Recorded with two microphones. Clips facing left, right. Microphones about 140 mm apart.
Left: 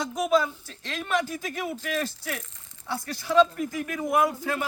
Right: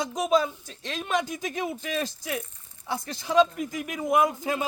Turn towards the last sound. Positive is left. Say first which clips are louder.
# right 1 dB
turn(degrees=-20)  # may be behind; listen again after turning